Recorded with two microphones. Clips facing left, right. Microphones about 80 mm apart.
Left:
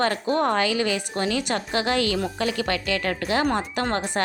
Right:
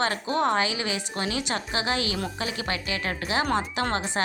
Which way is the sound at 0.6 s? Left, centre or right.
Left.